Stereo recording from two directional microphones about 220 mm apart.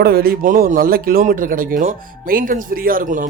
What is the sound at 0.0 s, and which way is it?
A man's voice, 45° right (ahead or behind).